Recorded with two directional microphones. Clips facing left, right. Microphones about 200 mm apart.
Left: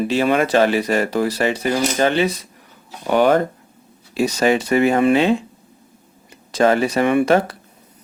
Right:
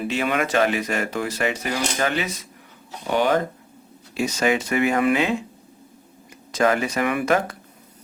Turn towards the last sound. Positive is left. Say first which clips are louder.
# left 6 dB
turn(degrees=30)  # may be behind; listen again after turning